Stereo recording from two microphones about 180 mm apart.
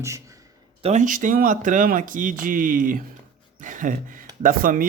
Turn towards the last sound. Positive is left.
turn(degrees=-50)  # may be behind; listen again after turning